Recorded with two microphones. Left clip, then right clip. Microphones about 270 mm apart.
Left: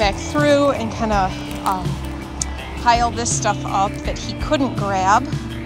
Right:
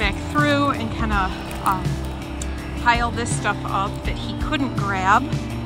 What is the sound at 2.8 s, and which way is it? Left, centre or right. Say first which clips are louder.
Speech: left 3 dB; centre.